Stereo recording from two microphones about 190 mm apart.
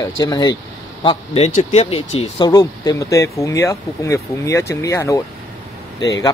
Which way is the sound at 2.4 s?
20° left (ahead or behind).